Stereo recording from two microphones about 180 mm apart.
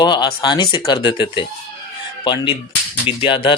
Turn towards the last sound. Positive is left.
turn(degrees=30)  # may be behind; listen again after turning